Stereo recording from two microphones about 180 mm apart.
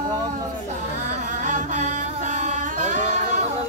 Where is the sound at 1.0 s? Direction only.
45° right (ahead or behind).